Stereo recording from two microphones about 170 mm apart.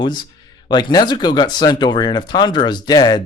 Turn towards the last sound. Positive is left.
turn(degrees=25)  # may be behind; listen again after turning